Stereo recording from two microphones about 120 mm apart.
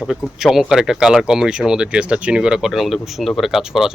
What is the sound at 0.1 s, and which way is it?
A man's voice, centre (ahead or behind).